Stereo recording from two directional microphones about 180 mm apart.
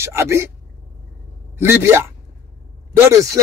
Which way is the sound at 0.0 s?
15° right (ahead or behind).